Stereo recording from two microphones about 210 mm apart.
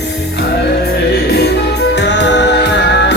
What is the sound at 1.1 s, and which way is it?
Music, 50° left (ahead or behind).